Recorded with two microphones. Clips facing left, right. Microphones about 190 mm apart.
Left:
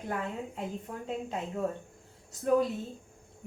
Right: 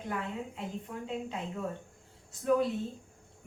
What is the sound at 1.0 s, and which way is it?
Speech, 40° left (ahead or behind).